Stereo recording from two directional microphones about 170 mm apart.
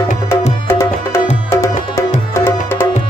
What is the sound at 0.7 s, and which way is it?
Music, 15° left (ahead or behind).